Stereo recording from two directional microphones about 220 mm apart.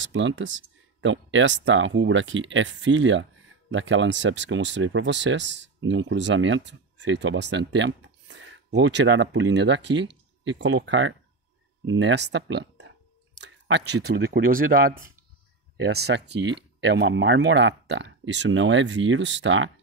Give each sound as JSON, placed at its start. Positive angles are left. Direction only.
{"t": 0.0, "sound": "speech", "side_deg": -55}